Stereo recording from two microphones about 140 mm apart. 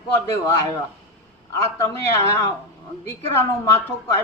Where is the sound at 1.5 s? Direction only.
20° left (ahead or behind).